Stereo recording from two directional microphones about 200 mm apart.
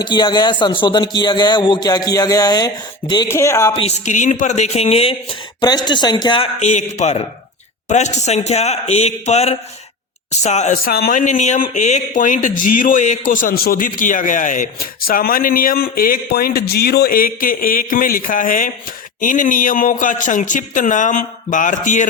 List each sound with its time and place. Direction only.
0.0 s a man's voice: 20° left (ahead or behind)
3.8 s speech: 35° left (ahead or behind)